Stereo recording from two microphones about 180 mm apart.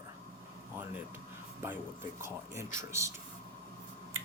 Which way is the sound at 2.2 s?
15° right (ahead or behind).